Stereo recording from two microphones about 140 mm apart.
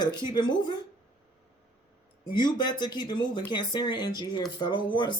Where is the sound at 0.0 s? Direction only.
30° left (ahead or behind).